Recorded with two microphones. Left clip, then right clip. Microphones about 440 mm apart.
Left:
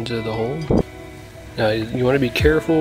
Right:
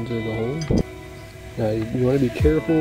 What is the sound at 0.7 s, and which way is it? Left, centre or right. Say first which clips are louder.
Music: left 5 dB; left.